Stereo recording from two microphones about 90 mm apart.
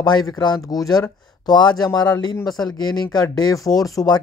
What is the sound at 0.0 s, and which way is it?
Speech, 55° left (ahead or behind).